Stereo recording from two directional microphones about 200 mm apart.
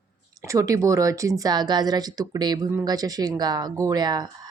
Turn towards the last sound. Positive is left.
turn(degrees=-20)  # may be behind; listen again after turning